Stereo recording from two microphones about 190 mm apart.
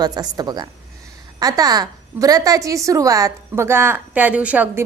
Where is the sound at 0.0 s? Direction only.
20° right (ahead or behind).